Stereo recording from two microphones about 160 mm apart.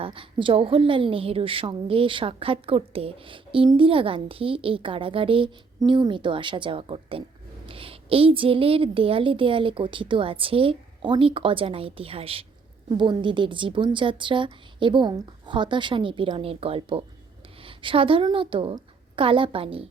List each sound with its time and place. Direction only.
0.0 s a woman's voice: 35° right (ahead or behind)